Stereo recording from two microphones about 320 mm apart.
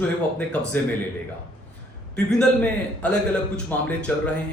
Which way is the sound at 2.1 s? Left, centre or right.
Centre.